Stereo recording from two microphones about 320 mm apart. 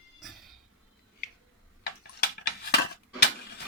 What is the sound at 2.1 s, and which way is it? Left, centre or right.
Dishes, left.